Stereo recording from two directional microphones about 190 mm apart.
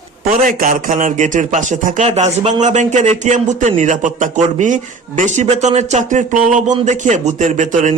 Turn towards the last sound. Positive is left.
turn(degrees=-40)  # may be behind; listen again after turning